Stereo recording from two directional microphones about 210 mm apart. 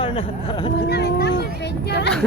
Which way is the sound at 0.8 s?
50° left (ahead or behind).